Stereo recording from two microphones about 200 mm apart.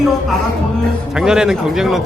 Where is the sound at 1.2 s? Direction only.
5° right (ahead or behind).